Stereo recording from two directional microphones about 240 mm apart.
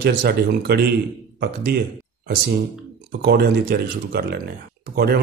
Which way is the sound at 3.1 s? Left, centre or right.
Right.